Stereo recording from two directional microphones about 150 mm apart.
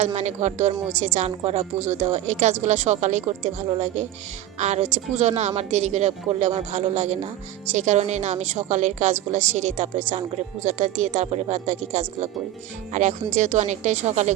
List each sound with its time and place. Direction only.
0.0 s a woman's voice: 50° right (ahead or behind)